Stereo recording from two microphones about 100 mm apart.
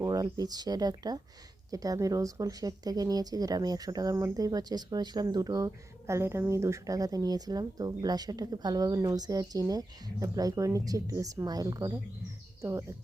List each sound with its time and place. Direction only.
0.0 s speech: 40° right (ahead or behind)